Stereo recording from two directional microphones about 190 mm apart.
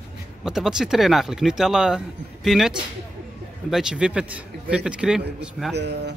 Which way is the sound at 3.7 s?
5° right (ahead or behind).